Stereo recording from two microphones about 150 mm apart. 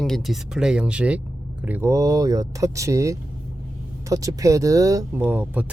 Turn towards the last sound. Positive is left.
turn(degrees=-10)  # may be behind; listen again after turning